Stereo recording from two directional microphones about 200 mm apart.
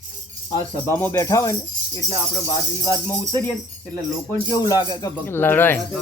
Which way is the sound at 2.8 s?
15° left (ahead or behind).